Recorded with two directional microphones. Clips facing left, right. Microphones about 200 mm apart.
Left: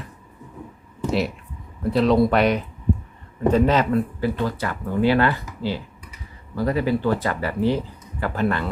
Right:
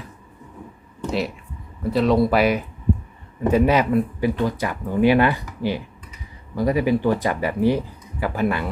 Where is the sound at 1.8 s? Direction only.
Centre (ahead or behind).